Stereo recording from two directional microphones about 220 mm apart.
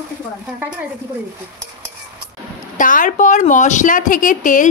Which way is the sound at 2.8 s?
35° left (ahead or behind).